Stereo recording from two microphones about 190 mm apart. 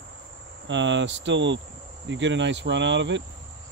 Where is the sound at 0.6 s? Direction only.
75° right (ahead or behind).